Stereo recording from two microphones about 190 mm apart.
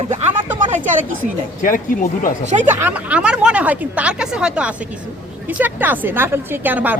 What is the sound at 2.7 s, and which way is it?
Speech, 10° right (ahead or behind).